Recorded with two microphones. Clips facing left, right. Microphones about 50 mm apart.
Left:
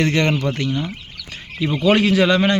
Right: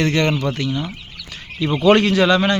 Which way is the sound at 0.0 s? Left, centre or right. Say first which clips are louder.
Even; left.